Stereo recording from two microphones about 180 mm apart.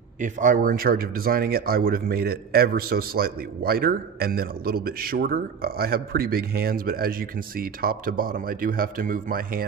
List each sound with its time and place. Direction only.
0.2 s speech: 45° right (ahead or behind)